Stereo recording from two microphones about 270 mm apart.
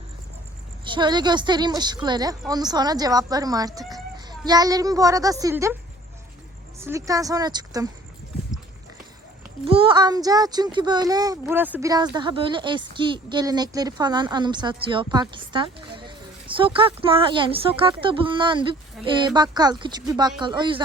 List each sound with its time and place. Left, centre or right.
0.9 s speech: centre
6.7 s speech: centre
9.6 s speech: centre